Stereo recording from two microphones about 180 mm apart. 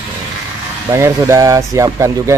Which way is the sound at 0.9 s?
15° right (ahead or behind).